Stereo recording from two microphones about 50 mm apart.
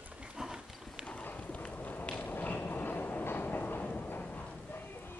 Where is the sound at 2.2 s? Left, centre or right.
Left.